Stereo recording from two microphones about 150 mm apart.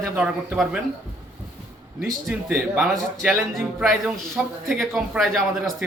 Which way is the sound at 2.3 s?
5° right (ahead or behind).